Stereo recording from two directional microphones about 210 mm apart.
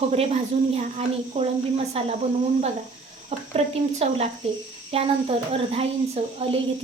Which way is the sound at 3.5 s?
30° right (ahead or behind).